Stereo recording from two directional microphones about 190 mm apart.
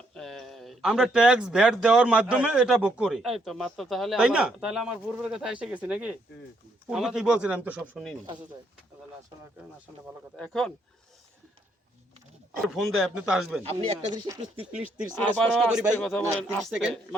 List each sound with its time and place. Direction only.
0.1 s speech: 5° left (ahead or behind)
10.3 s speech: 5° left (ahead or behind)
12.6 s speech: centre (ahead or behind)
13.6 s speech: 30° right (ahead or behind)
15.2 s speech: centre (ahead or behind)